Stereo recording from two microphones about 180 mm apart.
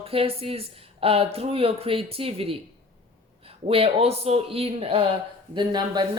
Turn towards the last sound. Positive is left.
turn(degrees=-25)  # may be behind; listen again after turning